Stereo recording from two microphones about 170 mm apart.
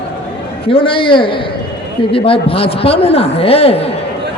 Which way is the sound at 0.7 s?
30° left (ahead or behind).